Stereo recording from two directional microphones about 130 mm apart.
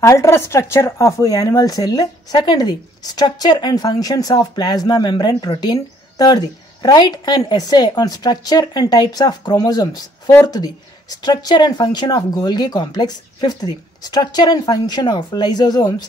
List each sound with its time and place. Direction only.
0.0 s speech: 20° left (ahead or behind)